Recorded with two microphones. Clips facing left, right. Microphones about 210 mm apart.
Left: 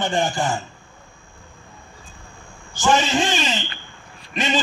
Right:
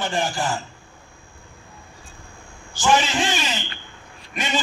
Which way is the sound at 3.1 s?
20° left (ahead or behind).